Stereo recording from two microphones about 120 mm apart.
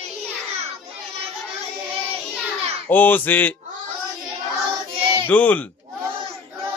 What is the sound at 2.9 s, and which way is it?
Speech, 15° left (ahead or behind).